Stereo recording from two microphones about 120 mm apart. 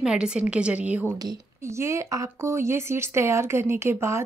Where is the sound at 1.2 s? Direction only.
25° right (ahead or behind).